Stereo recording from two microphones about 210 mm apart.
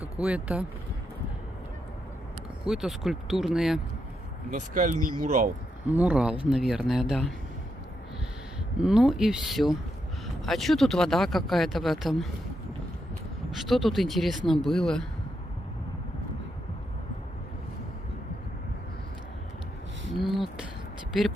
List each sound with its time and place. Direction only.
0.2 s speech: 5° right (ahead or behind)
2.6 s speech: centre (ahead or behind)
4.5 s speech: 40° right (ahead or behind)
5.9 s speech: 5° right (ahead or behind)
8.5 s speech: 5° right (ahead or behind)
13.7 s speech: centre (ahead or behind)
20.1 s a sound: centre (ahead or behind)